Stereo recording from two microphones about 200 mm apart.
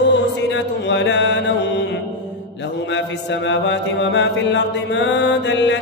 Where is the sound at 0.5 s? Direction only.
65° left (ahead or behind).